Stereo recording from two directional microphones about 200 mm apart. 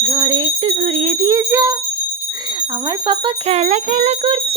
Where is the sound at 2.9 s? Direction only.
25° right (ahead or behind).